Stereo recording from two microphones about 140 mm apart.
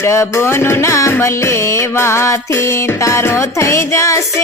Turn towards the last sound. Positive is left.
turn(degrees=20)  # may be behind; listen again after turning